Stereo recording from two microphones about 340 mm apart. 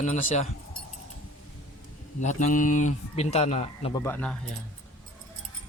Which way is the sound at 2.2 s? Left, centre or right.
Left.